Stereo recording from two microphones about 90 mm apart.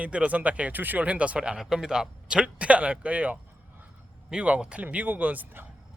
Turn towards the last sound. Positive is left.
turn(degrees=-20)  # may be behind; listen again after turning